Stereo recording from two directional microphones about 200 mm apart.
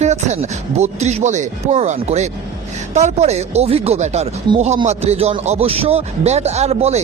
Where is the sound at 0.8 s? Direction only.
35° right (ahead or behind).